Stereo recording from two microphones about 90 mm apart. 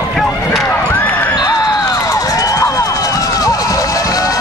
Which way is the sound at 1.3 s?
40° left (ahead or behind).